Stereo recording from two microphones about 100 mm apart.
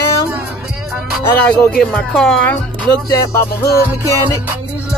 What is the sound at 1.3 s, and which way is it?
Speech, 15° left (ahead or behind).